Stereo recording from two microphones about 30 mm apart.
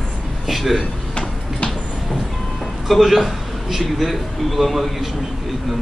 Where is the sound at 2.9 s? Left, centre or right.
Centre.